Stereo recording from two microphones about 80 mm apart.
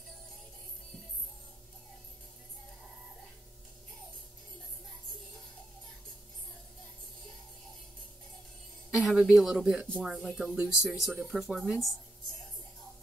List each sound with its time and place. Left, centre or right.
8.9 s speech: centre